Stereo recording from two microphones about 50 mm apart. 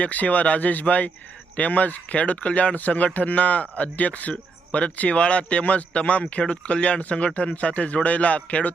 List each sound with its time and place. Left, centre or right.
0.0 s speech: left